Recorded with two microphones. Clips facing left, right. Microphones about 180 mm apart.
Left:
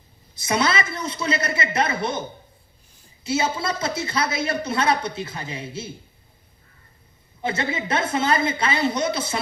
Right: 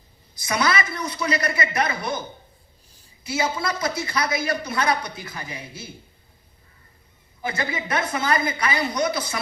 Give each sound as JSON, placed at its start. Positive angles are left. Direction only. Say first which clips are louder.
{"t": 0.3, "sound": "a woman's voice", "louder": "left 1 dB", "side_deg": 25}
{"t": 3.2, "sound": "a woman's voice", "louder": "left 2 dB", "side_deg": 25}
{"t": 7.4, "sound": "a woman's voice", "louder": "left 2 dB", "side_deg": 25}